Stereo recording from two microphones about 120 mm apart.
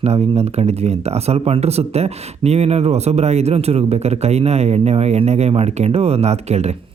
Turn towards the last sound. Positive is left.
turn(degrees=-65)  # may be behind; listen again after turning